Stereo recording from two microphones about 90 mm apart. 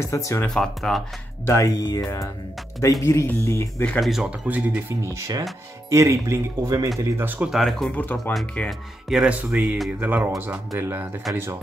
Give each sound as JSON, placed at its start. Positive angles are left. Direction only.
{"t": 0.0, "sound": "speech", "side_deg": 35}
{"t": 0.5, "sound": "speech", "side_deg": 0}
{"t": 1.5, "sound": "speech", "side_deg": 40}
{"t": 4.0, "sound": "speech", "side_deg": -5}
{"t": 4.3, "sound": "speech", "side_deg": -15}
{"t": 5.0, "sound": "speech", "side_deg": -35}
{"t": 7.0, "sound": "speech", "side_deg": -25}
{"t": 7.4, "sound": "speech", "side_deg": 0}
{"t": 7.9, "sound": "speech", "side_deg": 15}
{"t": 8.6, "sound": "speech", "side_deg": -5}
{"t": 9.3, "sound": "speech", "side_deg": -20}